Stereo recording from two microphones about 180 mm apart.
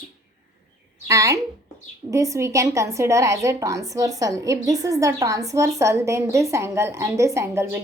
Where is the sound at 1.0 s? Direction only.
15° right (ahead or behind).